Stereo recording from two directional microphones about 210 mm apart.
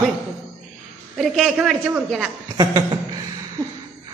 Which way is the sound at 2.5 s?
20° right (ahead or behind).